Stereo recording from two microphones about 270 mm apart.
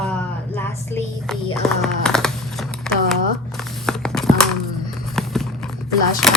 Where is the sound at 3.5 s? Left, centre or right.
Centre.